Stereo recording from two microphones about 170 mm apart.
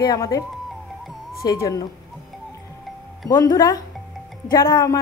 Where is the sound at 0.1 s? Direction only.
20° left (ahead or behind).